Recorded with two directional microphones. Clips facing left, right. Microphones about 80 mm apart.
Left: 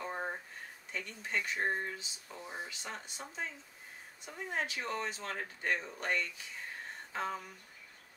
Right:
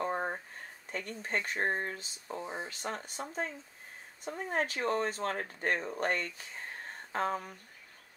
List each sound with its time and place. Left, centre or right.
0.0 s a sound: right
0.9 s speech: right
2.4 s speech: right
2.7 s speech: right